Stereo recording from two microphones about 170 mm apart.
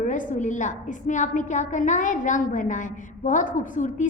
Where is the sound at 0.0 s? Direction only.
50° left (ahead or behind).